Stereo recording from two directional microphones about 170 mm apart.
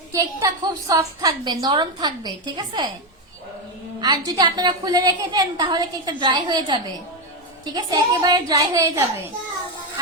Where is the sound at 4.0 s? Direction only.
25° right (ahead or behind).